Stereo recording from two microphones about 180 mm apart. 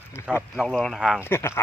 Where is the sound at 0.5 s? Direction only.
Centre (ahead or behind).